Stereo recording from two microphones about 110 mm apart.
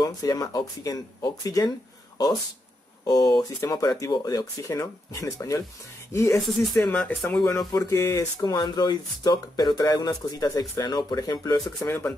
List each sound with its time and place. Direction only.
0.0 s speech: 35° left (ahead or behind)
3.1 s speech: 35° left (ahead or behind)
6.4 s speech: 5° left (ahead or behind)
6.9 s speech: 20° left (ahead or behind)
7.2 s speech: 5° left (ahead or behind)
7.5 s speech: 30° left (ahead or behind)